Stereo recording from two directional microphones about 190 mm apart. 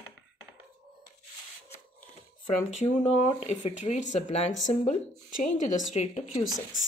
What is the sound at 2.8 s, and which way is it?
Speech, 35° left (ahead or behind).